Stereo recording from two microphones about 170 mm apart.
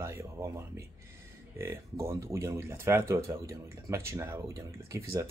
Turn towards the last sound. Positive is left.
turn(degrees=-15)  # may be behind; listen again after turning